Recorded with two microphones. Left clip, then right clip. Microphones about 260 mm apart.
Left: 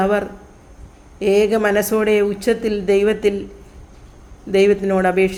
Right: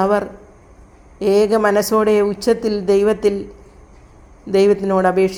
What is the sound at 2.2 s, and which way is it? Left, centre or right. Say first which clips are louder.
A woman's voice: right 1 dB; centre.